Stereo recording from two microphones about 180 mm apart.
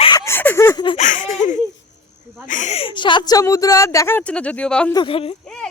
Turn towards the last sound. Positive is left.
turn(degrees=30)  # may be behind; listen again after turning